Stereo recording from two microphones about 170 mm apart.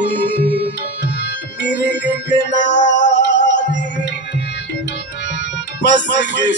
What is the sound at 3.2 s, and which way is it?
Music, 90° left.